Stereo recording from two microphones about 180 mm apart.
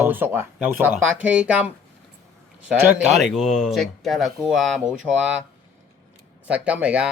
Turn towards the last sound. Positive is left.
turn(degrees=-5)  # may be behind; listen again after turning